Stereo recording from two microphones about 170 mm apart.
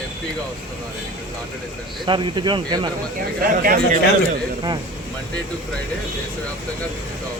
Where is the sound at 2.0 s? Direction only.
25° right (ahead or behind).